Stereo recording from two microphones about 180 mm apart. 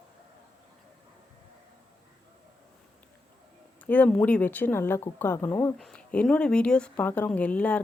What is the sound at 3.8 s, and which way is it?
Speech, 10° left (ahead or behind).